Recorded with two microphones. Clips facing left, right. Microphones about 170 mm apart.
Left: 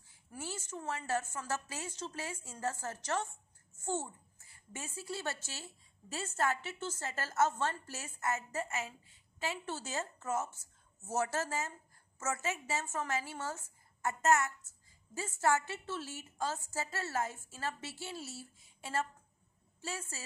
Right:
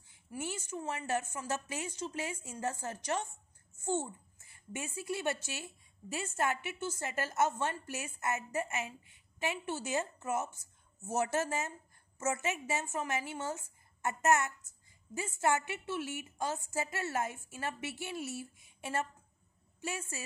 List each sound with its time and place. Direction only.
0.3 s a woman's voice: 15° right (ahead or behind)